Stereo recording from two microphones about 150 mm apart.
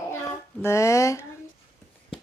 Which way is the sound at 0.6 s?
20° left (ahead or behind).